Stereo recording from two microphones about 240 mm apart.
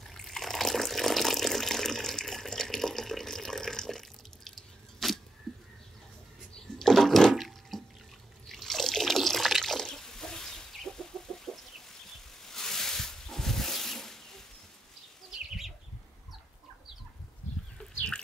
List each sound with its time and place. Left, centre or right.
0.0 s water: centre
4.5 s drip: centre
5.5 s a sound: centre
6.8 s toilet flush: centre
8.5 s water: centre
12.4 s a sound: centre
15.3 s bird: centre